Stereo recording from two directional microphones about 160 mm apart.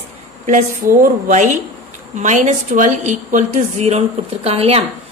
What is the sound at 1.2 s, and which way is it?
A woman's voice, 50° right (ahead or behind).